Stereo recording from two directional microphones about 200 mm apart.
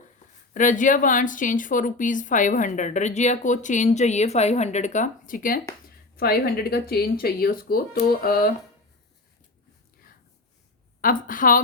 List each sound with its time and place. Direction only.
0.5 s speech: 40° left (ahead or behind)
11.0 s speech: 45° left (ahead or behind)